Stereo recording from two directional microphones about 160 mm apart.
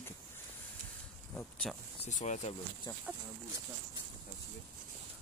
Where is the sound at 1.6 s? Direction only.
Centre (ahead or behind).